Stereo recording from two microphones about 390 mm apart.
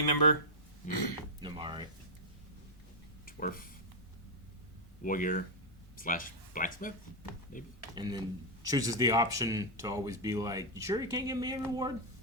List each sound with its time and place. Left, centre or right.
0.0 s speech: left
1.4 s speech: centre
3.2 s speech: left
5.0 s speech: left
7.9 s speech: centre